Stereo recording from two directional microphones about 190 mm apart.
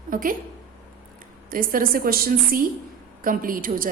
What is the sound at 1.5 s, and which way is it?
A woman's voice, 50° right (ahead or behind).